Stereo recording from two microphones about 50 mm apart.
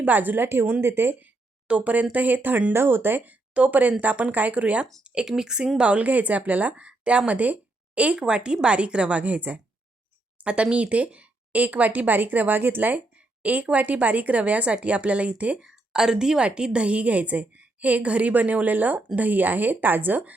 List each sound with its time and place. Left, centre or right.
0.0 s speech: right
0.8 s speech: right
1.6 s speech: right
3.5 s a woman's voice: right
5.4 s a woman's voice: centre
15.6 s a woman's voice: centre; by 20.3 s right